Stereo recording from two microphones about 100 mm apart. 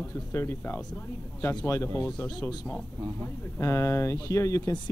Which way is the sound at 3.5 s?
30° left (ahead or behind).